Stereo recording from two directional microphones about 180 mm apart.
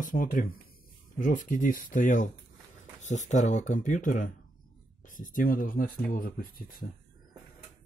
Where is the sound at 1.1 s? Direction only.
45° left (ahead or behind).